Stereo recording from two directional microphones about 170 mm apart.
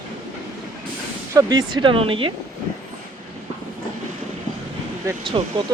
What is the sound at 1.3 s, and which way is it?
Speech, 25° right (ahead or behind).